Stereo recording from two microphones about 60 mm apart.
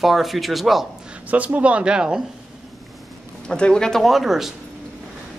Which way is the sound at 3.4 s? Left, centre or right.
Centre.